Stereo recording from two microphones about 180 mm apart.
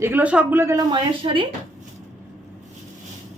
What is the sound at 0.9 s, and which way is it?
Speech, 25° right (ahead or behind).